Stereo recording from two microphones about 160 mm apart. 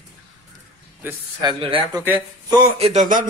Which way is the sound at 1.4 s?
30° right (ahead or behind).